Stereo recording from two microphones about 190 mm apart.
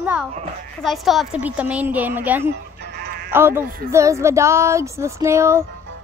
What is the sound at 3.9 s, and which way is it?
A child's voice, 15° right (ahead or behind).